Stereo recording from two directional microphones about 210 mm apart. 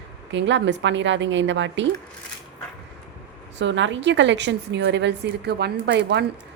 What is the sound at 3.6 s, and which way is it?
A woman's voice, 60° right (ahead or behind).